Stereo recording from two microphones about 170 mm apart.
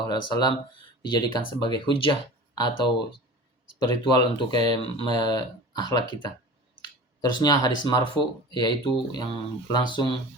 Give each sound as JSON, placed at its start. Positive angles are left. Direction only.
{"t": 0.0, "sound": "speech", "side_deg": 25}
{"t": 7.2, "sound": "speech", "side_deg": 20}